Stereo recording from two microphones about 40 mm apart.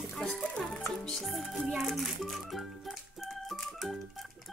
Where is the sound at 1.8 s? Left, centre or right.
Centre.